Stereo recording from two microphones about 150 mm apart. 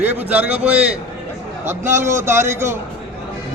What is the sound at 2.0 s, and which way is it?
Speech, 15° right (ahead or behind).